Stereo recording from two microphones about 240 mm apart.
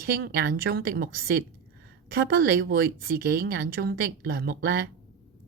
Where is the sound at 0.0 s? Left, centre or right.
Right.